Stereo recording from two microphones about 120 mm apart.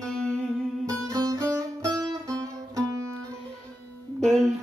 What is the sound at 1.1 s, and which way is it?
Music, 30° right (ahead or behind).